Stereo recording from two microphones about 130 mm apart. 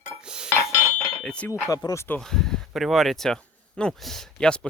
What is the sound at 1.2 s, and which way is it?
Speech, 10° left (ahead or behind).